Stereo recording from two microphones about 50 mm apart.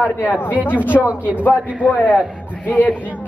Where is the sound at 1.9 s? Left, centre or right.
Left.